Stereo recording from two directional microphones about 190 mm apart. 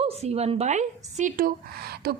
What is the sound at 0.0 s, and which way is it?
A woman's voice, 35° right (ahead or behind).